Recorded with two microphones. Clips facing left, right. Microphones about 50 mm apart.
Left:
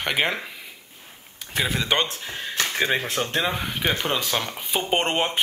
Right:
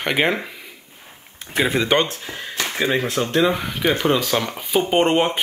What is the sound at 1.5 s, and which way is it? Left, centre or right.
Speech, right.